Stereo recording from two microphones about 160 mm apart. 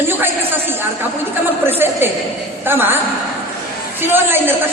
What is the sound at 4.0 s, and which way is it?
Speech, 15° right (ahead or behind).